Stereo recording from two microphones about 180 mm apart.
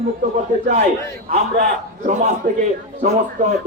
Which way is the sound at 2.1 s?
45° right (ahead or behind).